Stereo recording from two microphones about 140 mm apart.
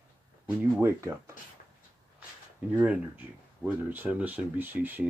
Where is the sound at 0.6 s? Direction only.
20° right (ahead or behind).